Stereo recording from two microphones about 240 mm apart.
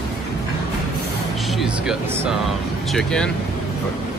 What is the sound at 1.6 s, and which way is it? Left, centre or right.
Speech, centre.